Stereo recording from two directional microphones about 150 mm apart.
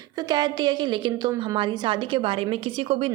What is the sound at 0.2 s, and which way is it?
A woman's voice, 25° right (ahead or behind).